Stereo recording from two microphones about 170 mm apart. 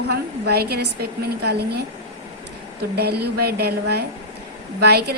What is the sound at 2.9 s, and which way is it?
A woman's voice, 70° right (ahead or behind).